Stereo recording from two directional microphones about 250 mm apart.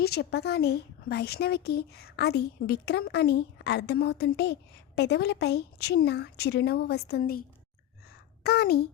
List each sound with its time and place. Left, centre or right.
0.0 s speech: left
8.4 s speech: left